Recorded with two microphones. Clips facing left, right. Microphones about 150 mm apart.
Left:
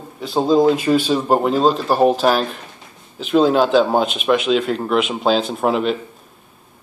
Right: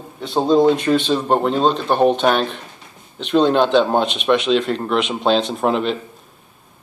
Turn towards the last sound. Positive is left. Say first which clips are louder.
# left 1 dB
turn(degrees=5)  # may be behind; listen again after turning